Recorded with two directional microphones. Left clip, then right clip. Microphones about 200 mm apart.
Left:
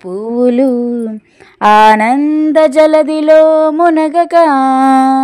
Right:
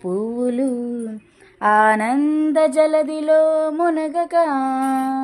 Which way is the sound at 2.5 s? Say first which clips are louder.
Left 9 dB; 35° left (ahead or behind).